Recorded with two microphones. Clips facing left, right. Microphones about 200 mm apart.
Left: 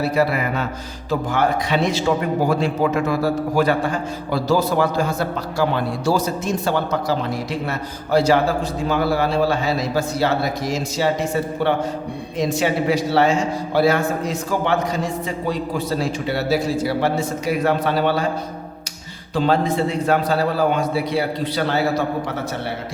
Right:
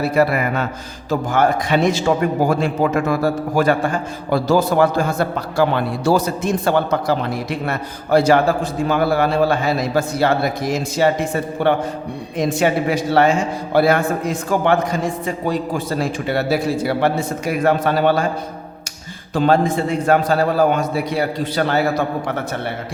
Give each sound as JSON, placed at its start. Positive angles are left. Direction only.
{"t": 0.1, "sound": "a man's voice", "side_deg": -50}
{"t": 19.3, "sound": "a man's voice", "side_deg": -50}